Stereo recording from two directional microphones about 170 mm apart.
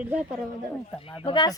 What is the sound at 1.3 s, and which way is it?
Speech, 25° left (ahead or behind).